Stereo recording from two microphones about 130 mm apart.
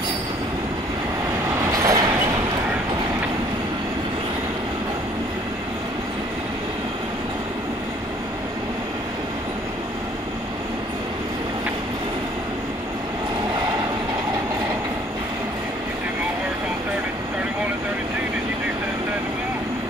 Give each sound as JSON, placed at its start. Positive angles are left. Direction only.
{"t": 1.7, "sound": "train", "side_deg": -25}